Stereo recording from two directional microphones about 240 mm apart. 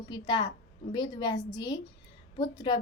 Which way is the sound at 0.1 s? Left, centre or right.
Centre.